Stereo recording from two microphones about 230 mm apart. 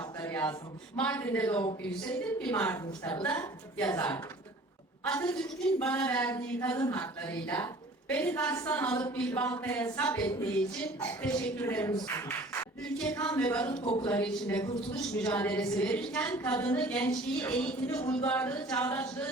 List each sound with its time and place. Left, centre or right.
0.2 s a sound: centre
0.9 s a woman's voice: centre
3.2 s a woman's voice: centre
13.8 s speech: left
14.1 s a woman's voice: centre